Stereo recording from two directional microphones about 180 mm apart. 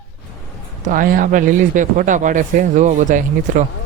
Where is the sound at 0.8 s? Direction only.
50° right (ahead or behind).